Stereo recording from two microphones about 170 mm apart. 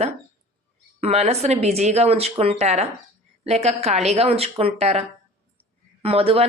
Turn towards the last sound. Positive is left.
turn(degrees=-35)  # may be behind; listen again after turning